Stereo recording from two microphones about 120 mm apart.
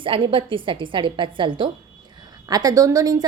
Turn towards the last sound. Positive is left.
turn(degrees=-30)  # may be behind; listen again after turning